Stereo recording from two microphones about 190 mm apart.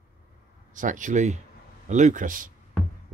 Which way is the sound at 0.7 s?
40° right (ahead or behind).